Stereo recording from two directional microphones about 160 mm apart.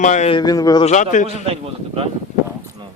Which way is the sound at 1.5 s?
40° right (ahead or behind).